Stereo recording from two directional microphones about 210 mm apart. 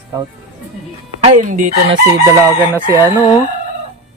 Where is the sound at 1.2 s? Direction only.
35° right (ahead or behind).